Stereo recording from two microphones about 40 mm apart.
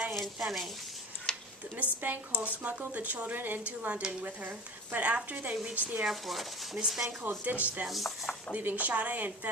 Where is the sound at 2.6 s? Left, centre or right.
Right.